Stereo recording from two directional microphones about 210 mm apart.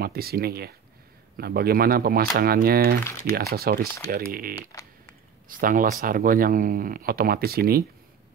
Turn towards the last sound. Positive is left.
turn(degrees=-45)  # may be behind; listen again after turning